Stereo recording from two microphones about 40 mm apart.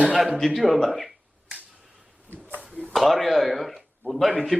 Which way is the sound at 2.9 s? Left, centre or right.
Centre.